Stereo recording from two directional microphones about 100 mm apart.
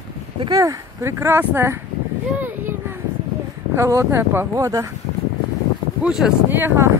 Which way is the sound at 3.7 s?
30° right (ahead or behind).